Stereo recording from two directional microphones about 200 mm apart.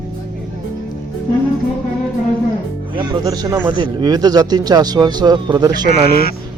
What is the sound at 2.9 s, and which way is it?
Speech, 20° right (ahead or behind).